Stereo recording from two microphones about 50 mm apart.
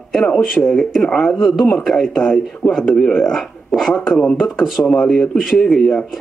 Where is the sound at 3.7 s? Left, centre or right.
Centre.